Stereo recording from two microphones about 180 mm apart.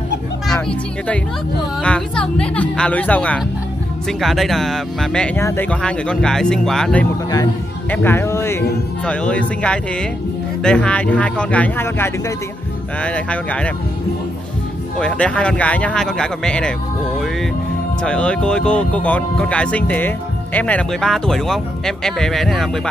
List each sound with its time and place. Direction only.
0.5 s speech: 5° left (ahead or behind)
15.0 s speech: 5° left (ahead or behind)
18.0 s speech: 5° left (ahead or behind)